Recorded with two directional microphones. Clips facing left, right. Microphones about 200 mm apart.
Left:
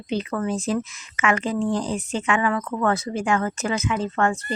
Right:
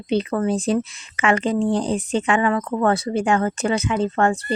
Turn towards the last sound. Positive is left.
turn(degrees=-30)  # may be behind; listen again after turning